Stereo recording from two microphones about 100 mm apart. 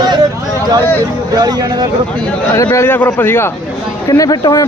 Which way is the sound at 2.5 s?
25° left (ahead or behind).